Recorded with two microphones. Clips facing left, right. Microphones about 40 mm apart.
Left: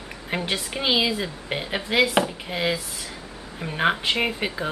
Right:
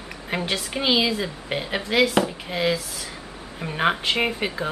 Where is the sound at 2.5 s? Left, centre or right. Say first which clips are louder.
Right 2 dB; centre.